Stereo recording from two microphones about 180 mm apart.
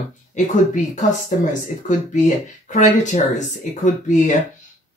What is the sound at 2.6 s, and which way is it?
Speech, 45° left (ahead or behind).